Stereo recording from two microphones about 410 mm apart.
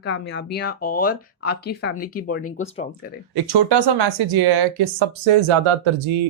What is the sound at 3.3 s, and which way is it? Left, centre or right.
Speech, right.